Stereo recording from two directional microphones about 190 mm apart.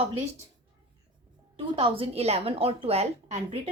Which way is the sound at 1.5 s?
30° right (ahead or behind).